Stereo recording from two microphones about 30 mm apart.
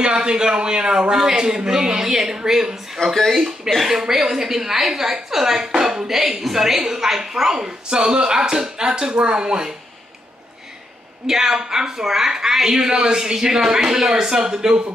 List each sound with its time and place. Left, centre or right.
0.0 s speech: right
3.0 s speech: left
3.3 s a woman's voice: centre
6.0 s a woman's voice: centre
11.2 s a woman's voice: centre